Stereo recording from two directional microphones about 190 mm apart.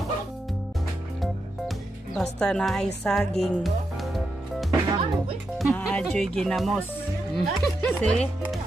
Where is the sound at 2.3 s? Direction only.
5° left (ahead or behind).